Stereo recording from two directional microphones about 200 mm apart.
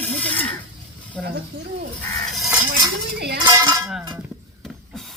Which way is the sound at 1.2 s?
50° right (ahead or behind).